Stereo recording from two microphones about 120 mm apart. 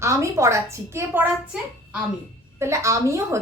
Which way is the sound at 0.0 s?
25° right (ahead or behind).